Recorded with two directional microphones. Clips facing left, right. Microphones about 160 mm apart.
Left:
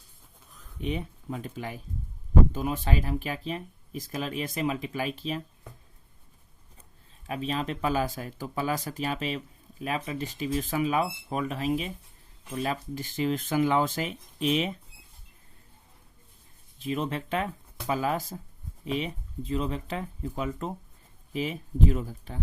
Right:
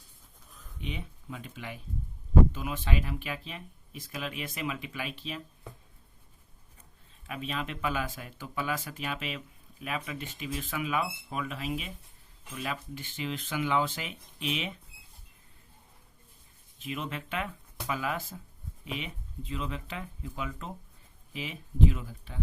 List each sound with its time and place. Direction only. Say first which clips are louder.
0.8 s speech: left 8 dB; 45° left (ahead or behind)
7.3 s speech: left 5 dB; 35° left (ahead or behind)
16.8 s speech: left 6 dB; 35° left (ahead or behind)